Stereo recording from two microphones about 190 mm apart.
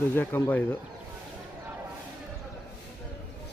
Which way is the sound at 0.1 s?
10° left (ahead or behind).